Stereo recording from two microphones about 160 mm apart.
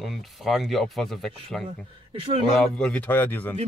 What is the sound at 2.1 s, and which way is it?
Speech, 35° right (ahead or behind).